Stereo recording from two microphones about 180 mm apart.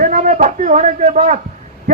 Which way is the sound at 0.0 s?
45° right (ahead or behind).